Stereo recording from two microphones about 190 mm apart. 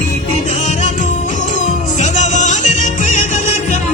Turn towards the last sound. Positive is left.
turn(degrees=40)  # may be behind; listen again after turning